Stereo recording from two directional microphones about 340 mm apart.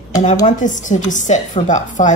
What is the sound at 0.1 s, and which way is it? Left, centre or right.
A woman's voice, centre.